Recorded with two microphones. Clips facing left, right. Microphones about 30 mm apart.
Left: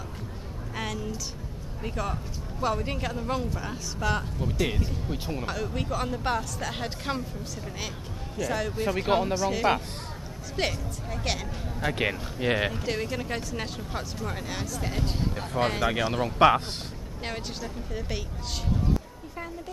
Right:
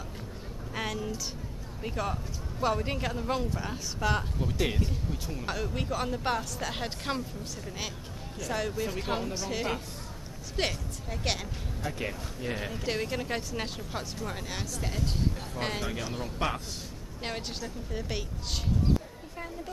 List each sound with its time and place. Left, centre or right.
0.7 s a sound: centre
1.8 s speech: centre
5.1 s speech: left
5.5 s speech: centre
8.4 s speech: centre
8.7 s speech: left
9.3 s speech: centre
11.8 s speech: left
12.8 s speech: centre
15.8 s speech: left
17.2 s speech: centre